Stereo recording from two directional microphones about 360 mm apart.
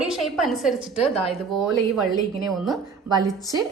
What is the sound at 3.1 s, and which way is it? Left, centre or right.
Speech, centre.